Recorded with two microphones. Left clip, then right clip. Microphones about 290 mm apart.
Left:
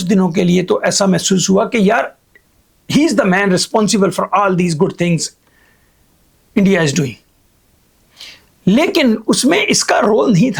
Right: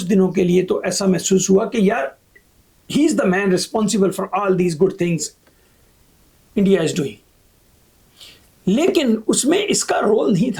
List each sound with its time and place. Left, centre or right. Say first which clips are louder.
0.0 s speech: left 2 dB; left
6.5 s speech: left 3 dB; left